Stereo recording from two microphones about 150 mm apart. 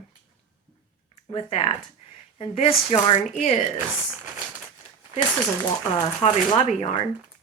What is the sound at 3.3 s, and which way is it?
Speech, 55° left (ahead or behind).